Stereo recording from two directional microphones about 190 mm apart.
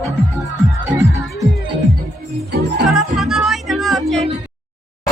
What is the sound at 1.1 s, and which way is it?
Music, 15° right (ahead or behind).